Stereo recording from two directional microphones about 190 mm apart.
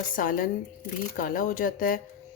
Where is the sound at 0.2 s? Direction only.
45° left (ahead or behind).